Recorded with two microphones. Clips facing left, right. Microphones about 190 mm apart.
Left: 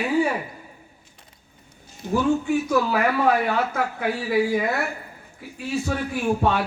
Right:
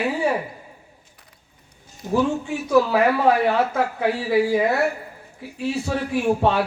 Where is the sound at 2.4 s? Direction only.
30° right (ahead or behind).